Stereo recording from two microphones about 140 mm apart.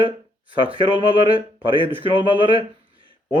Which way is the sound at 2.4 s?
35° right (ahead or behind).